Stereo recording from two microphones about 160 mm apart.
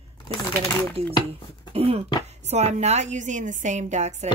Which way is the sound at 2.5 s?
45° right (ahead or behind).